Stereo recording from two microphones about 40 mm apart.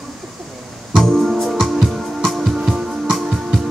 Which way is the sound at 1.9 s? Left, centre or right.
Centre.